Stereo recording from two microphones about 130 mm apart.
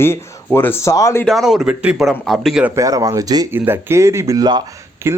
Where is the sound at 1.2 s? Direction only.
Centre (ahead or behind).